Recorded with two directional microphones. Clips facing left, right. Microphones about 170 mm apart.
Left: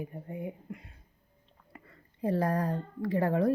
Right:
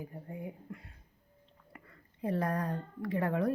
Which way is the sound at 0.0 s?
20° left (ahead or behind).